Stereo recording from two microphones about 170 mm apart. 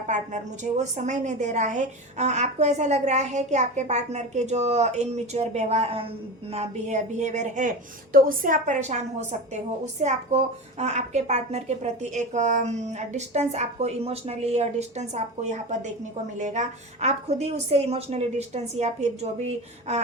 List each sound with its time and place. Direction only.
0.1 s a woman's voice: 45° right (ahead or behind)
8.1 s a woman's voice: 55° right (ahead or behind); by 20.0 s 40° right (ahead or behind)